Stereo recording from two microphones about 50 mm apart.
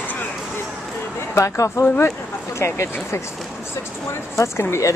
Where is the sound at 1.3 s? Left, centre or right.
Left.